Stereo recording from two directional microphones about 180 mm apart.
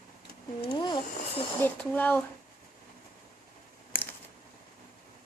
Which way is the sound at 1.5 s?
10° left (ahead or behind).